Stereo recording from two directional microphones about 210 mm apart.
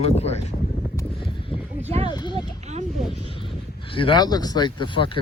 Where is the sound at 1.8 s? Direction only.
30° right (ahead or behind).